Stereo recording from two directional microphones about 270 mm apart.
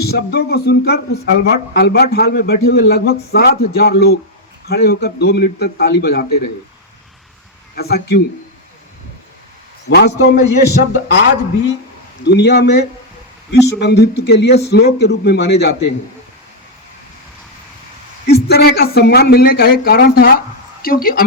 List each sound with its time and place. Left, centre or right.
0.0 s speech: left
7.8 s speech: left
10.2 s speech: left
12.2 s speech: left
18.3 s speech: left